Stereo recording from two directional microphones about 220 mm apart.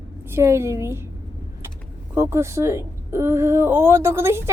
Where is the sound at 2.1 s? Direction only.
10° right (ahead or behind).